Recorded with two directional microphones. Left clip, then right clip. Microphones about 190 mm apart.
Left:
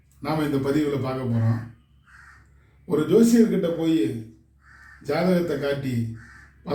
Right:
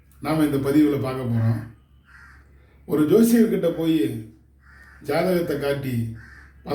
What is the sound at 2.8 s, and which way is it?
Speech, 15° right (ahead or behind).